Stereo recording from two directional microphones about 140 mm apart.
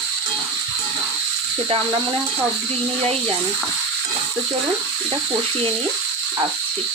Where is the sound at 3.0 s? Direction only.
40° right (ahead or behind).